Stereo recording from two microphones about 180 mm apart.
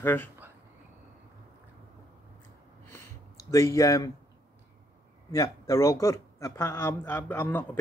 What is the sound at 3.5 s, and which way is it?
Speech, 20° left (ahead or behind).